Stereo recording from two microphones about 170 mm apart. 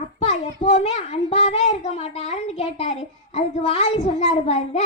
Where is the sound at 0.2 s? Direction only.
40° left (ahead or behind).